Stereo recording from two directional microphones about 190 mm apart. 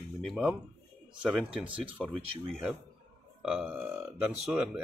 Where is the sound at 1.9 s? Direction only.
5° right (ahead or behind).